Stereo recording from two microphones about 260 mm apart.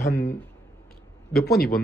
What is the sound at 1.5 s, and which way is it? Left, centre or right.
Speech, left.